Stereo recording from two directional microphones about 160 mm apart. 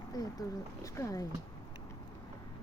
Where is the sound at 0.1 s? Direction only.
25° left (ahead or behind).